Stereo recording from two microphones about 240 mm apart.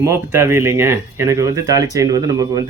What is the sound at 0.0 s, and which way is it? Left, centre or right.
Speech, centre.